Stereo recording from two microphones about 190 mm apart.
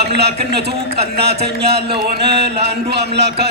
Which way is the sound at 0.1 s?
60° right (ahead or behind).